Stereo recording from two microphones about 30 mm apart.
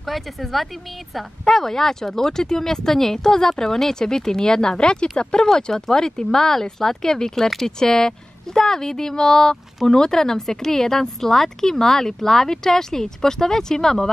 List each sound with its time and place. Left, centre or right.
0.0 s speech: centre